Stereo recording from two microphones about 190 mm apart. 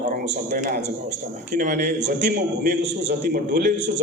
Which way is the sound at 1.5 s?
40° right (ahead or behind).